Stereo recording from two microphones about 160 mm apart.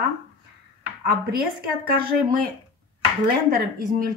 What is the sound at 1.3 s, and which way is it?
Speech, 70° right (ahead or behind).